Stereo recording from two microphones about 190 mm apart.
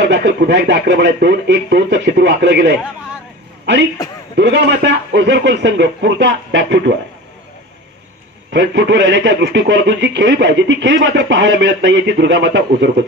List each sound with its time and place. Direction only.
0.0 s speech: 60° right (ahead or behind)
4.4 s speech: 65° right (ahead or behind)
8.5 s speech: 70° right (ahead or behind)